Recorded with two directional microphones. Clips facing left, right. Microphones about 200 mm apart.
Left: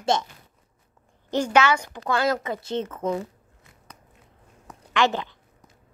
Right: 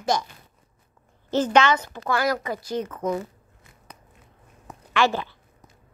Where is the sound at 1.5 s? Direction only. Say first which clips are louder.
Even; 10° left (ahead or behind).